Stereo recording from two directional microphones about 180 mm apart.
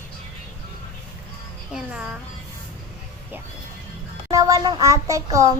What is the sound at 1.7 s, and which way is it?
Speech, 5° right (ahead or behind).